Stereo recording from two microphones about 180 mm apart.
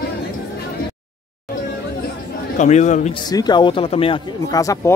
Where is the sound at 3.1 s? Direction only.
25° left (ahead or behind).